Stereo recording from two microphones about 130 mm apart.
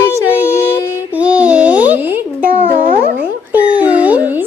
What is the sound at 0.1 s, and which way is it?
Child singing, 20° left (ahead or behind).